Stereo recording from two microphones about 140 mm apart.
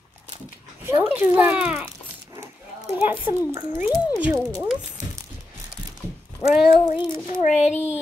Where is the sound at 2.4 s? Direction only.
20° right (ahead or behind).